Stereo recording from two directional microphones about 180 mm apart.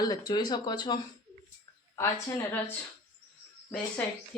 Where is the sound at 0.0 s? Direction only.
25° left (ahead or behind).